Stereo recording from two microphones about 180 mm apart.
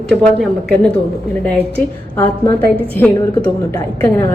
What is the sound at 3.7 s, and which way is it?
Speech, 20° left (ahead or behind).